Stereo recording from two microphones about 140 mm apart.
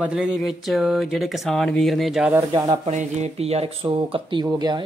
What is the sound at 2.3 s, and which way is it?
Speech, 25° right (ahead or behind).